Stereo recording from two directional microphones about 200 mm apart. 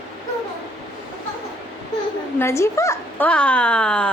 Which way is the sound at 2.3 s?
15° left (ahead or behind).